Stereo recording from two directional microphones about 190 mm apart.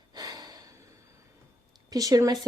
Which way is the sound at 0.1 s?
20° right (ahead or behind).